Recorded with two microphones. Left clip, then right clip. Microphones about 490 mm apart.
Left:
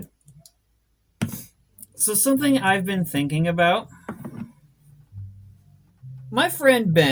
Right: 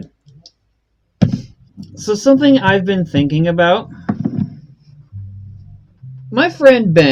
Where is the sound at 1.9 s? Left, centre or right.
Left.